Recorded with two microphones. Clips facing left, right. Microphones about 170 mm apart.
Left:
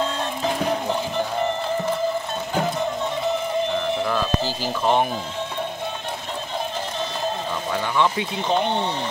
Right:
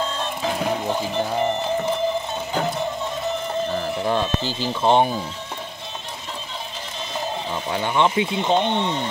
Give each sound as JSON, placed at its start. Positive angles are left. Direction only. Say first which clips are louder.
{"t": 4.6, "sound": "speech", "louder": "right 4 dB", "side_deg": -30}
{"t": 7.7, "sound": "speech", "louder": "right 2 dB", "side_deg": -25}